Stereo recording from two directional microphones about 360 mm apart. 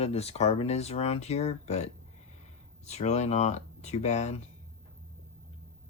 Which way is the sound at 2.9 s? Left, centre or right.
Centre.